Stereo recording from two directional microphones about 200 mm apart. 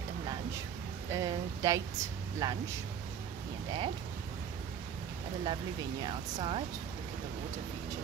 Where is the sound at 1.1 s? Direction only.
15° right (ahead or behind).